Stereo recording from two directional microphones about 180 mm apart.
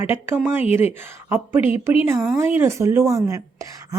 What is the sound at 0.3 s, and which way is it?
A woman's voice, 10° right (ahead or behind).